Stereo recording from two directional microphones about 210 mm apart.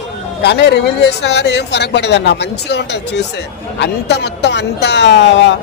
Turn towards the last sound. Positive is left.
turn(degrees=60)  # may be behind; listen again after turning